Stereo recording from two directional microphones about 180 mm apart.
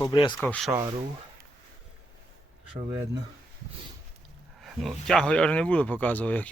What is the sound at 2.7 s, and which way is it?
Speech, 30° right (ahead or behind).